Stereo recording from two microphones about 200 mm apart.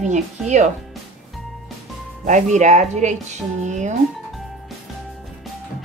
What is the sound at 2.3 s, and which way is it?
Speech, 35° right (ahead or behind).